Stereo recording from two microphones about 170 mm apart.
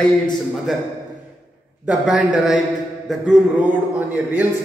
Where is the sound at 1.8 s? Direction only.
5° right (ahead or behind).